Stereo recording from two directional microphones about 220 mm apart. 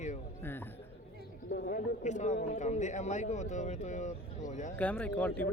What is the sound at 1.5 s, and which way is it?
Speech, 45° left (ahead or behind).